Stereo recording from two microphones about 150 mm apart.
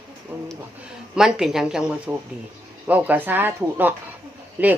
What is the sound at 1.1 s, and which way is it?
Speech, 5° right (ahead or behind).